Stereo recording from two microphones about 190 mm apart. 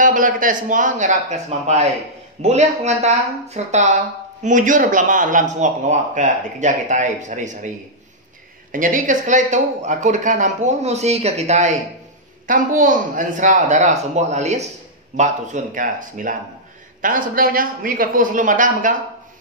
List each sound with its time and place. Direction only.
0.0 s a woman's voice: 45° right (ahead or behind)
8.7 s a woman's voice: 45° right (ahead or behind)